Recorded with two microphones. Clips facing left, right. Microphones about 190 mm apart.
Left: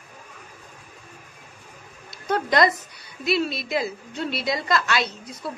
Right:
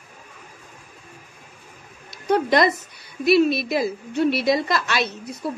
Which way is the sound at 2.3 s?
25° right (ahead or behind).